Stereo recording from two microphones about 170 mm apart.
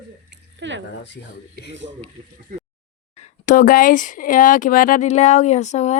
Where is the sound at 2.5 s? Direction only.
55° right (ahead or behind).